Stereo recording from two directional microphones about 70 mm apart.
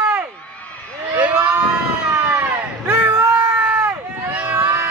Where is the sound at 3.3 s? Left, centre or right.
Centre.